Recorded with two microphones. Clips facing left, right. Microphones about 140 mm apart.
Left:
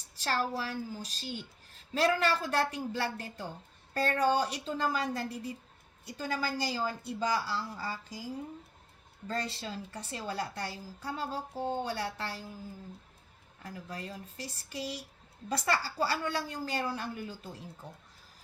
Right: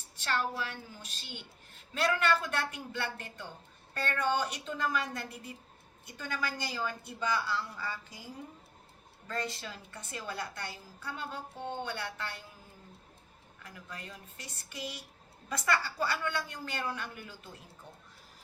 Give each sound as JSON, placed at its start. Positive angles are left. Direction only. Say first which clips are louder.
{"t": 0.2, "sound": "a woman's voice", "louder": "left 1 dB", "side_deg": 35}
{"t": 9.2, "sound": "a woman's voice", "louder": "left 2 dB", "side_deg": 30}
{"t": 13.6, "sound": "a woman's voice", "louder": "left 5 dB", "side_deg": 35}